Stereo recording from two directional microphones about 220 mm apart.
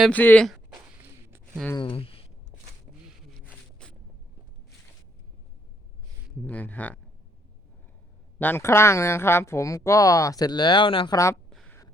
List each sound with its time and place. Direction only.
0.0 s speech: 5° left (ahead or behind)
1.7 s speech: 25° left (ahead or behind)
3.4 s scrape: 5° left (ahead or behind)
6.4 s speech: 5° left (ahead or behind)
8.4 s speech: 10° left (ahead or behind)
11.4 s a sound: centre (ahead or behind)